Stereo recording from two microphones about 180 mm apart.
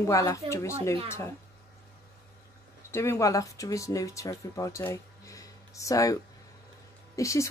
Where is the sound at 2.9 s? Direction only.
15° left (ahead or behind).